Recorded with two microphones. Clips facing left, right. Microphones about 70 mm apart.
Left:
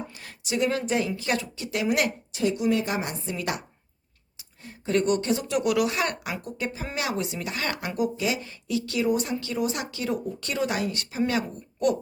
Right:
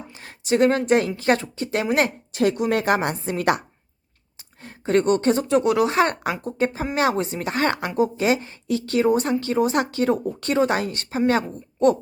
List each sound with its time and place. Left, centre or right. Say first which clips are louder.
0.1 s a sound: right 2 dB; right
0.4 s speech: right 8 dB; right
2.3 s a woman's voice: right 3 dB; right
4.6 s speech: right 5 dB; right